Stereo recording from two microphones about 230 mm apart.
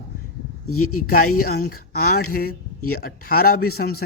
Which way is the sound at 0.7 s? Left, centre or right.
Left.